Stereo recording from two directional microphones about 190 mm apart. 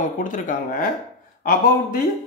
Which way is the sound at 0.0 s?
45° left (ahead or behind).